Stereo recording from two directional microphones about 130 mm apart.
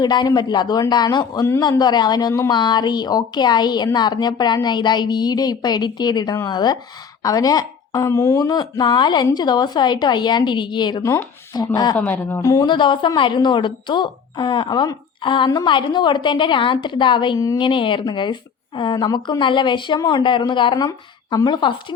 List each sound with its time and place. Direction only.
0.0 s a woman's voice: 35° left (ahead or behind)
11.0 s speech: 20° left (ahead or behind)
11.9 s speech: 10° left (ahead or behind)
12.4 s a woman's voice: 25° left (ahead or behind)
17.6 s a woman's voice: 40° left (ahead or behind)